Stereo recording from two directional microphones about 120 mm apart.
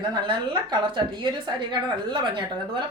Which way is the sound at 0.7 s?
40° right (ahead or behind).